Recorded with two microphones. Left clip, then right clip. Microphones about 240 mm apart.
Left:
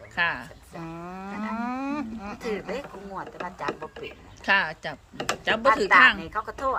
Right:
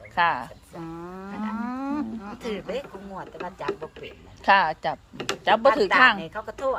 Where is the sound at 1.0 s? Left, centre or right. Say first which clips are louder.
Left 2 dB; left.